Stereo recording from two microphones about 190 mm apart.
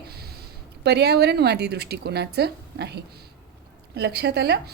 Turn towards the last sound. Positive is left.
turn(degrees=-60)  # may be behind; listen again after turning